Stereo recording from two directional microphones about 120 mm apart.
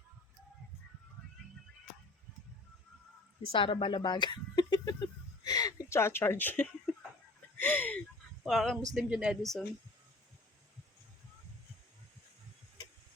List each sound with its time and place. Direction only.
3.5 s speech: 45° left (ahead or behind); by 8.0 s 10° left (ahead or behind)
8.4 s speech: centre (ahead or behind)